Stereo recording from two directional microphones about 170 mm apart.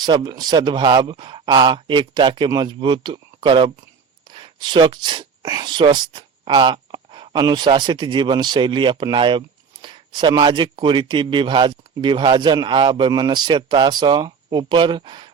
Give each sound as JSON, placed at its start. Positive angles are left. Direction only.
{"t": 0.0, "sound": "a man's voice", "side_deg": -25}